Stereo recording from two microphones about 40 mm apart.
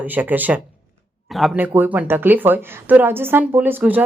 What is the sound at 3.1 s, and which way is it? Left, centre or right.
Speech, right.